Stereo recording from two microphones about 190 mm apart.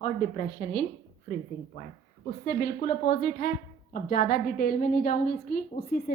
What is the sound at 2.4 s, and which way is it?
A woman's voice, 55° left (ahead or behind).